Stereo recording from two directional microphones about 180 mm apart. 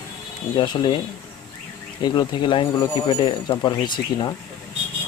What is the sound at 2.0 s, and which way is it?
Speech, 25° left (ahead or behind).